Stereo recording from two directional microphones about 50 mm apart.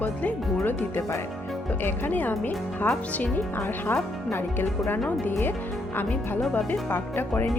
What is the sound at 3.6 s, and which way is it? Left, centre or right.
Speech, left.